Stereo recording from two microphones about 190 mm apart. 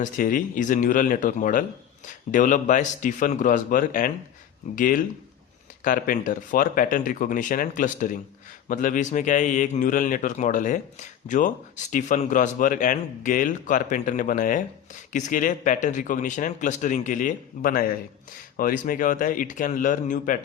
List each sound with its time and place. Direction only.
0.0 s speech: 45° left (ahead or behind)